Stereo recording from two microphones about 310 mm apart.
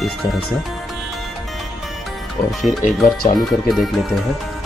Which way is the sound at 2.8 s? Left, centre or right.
Left.